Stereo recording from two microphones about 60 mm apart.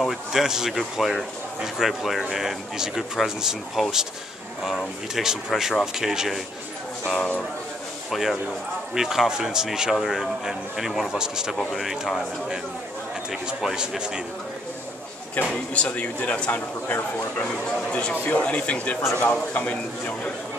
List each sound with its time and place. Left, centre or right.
0.0 s speech: centre
5.1 s speech: centre
7.2 s speech: left
8.1 s speech: centre
13.3 s speech: centre
15.5 s speech: left
16.8 s speech: left
17.6 s speech: centre
19.0 s a man's voice: left
19.5 s speech: left